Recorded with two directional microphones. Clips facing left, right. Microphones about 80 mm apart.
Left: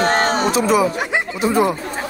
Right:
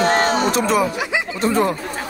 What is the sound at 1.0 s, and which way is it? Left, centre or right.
Speech, left.